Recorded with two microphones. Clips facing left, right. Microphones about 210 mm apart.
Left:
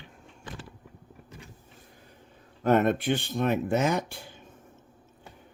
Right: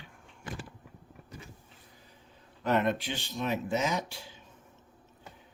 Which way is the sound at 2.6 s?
50° left (ahead or behind).